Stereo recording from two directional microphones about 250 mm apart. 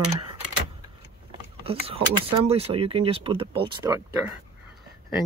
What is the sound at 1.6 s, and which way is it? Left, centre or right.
Speech, right.